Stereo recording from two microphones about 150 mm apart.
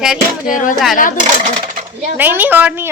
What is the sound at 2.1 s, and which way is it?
Speech, 10° right (ahead or behind).